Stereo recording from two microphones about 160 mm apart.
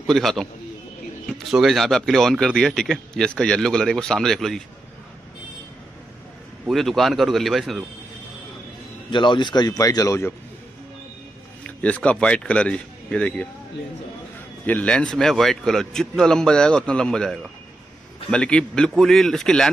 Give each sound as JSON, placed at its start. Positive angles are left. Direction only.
{"t": 0.0, "sound": "a man's voice", "side_deg": 0}
{"t": 6.7, "sound": "speech", "side_deg": 0}
{"t": 9.1, "sound": "speech", "side_deg": 30}
{"t": 11.6, "sound": "a man's voice", "side_deg": 10}
{"t": 14.7, "sound": "speech", "side_deg": 10}